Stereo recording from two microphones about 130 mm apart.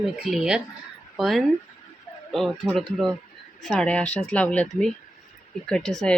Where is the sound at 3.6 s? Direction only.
5° left (ahead or behind).